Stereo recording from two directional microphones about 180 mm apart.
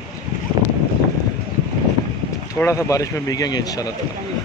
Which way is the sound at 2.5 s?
15° left (ahead or behind).